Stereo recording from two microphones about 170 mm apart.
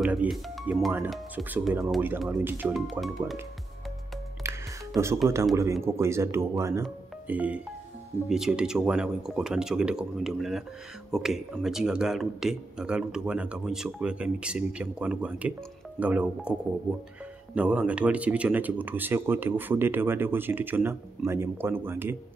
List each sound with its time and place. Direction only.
0.0 s speech: 5° right (ahead or behind)
2.7 s speech: centre (ahead or behind)
4.9 s speech: 15° right (ahead or behind)
17.6 s speech: 10° right (ahead or behind)